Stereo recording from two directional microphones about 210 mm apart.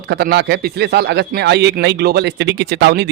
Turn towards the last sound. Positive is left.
turn(degrees=-55)  # may be behind; listen again after turning